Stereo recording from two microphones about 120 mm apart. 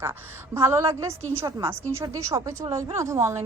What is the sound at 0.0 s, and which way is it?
A woman's voice, 20° right (ahead or behind).